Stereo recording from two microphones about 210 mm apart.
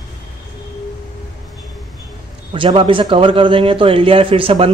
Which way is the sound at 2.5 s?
25° right (ahead or behind).